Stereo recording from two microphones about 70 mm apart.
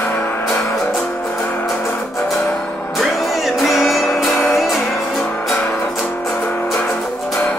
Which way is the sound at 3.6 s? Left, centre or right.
Centre.